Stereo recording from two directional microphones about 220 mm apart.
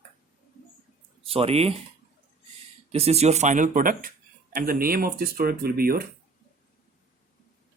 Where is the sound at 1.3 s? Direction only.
25° right (ahead or behind).